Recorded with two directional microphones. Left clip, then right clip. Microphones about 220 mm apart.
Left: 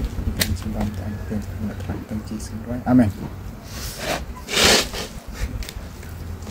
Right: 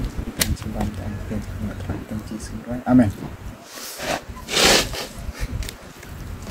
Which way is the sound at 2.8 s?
20° left (ahead or behind).